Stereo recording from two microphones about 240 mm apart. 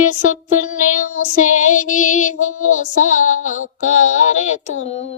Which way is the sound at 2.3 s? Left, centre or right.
Left.